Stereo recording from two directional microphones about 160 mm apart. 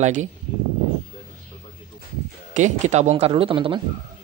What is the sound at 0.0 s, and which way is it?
Speech, 50° right (ahead or behind).